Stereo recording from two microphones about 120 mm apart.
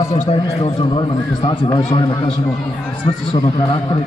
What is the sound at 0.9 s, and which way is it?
Speech, 40° left (ahead or behind).